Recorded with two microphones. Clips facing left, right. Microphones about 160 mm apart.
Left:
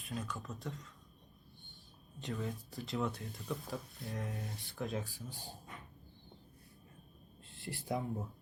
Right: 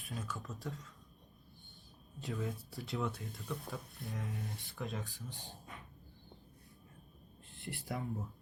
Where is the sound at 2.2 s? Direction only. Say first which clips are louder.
Even; centre (ahead or behind).